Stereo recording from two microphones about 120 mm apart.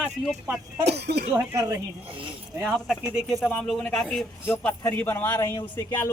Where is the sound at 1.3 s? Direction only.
30° right (ahead or behind).